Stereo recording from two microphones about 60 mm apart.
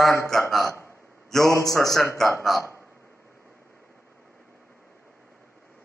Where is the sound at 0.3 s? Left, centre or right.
Centre.